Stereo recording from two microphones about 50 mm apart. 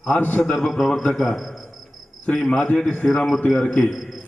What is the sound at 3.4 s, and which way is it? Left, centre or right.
Speech, left.